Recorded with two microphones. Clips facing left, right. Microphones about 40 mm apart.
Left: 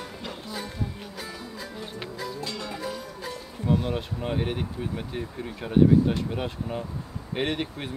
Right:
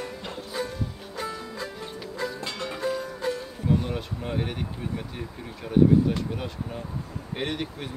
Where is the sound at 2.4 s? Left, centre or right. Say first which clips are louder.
Right 1 dB; right.